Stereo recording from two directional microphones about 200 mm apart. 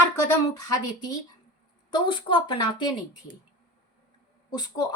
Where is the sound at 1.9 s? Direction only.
25° left (ahead or behind).